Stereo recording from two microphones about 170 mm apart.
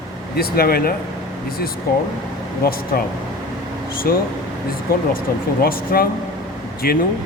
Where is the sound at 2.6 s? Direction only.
60° left (ahead or behind).